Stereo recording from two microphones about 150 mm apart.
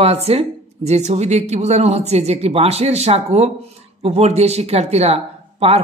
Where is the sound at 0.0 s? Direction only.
45° right (ahead or behind).